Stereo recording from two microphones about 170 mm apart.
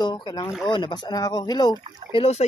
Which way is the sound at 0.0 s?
25° left (ahead or behind).